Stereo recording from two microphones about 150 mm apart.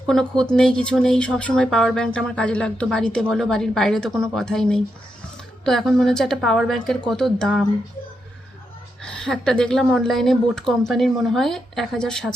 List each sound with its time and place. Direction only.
0.1 s a woman's voice: 5° left (ahead or behind)
9.0 s a woman's voice: 5° left (ahead or behind)